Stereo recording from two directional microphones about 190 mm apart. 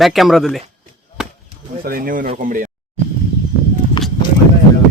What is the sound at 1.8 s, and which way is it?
Speech, 50° right (ahead or behind).